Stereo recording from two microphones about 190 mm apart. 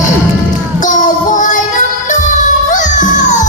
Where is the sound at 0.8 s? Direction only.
40° left (ahead or behind).